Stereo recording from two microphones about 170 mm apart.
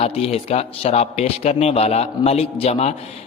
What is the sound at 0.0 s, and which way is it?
A man's voice, 35° left (ahead or behind).